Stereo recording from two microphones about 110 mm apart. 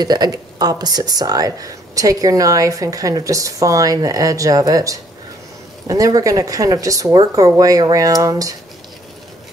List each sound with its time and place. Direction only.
0.0 s speech: 40° right (ahead or behind)